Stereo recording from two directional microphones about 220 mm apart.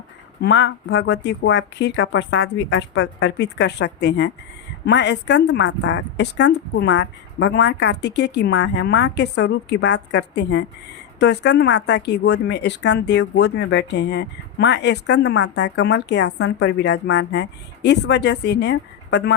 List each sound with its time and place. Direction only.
0.4 s a woman's voice: 55° left (ahead or behind)